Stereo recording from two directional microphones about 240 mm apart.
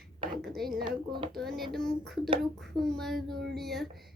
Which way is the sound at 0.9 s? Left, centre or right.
Centre.